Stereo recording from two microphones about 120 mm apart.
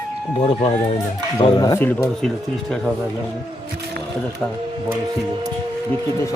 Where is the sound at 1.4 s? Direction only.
50° left (ahead or behind).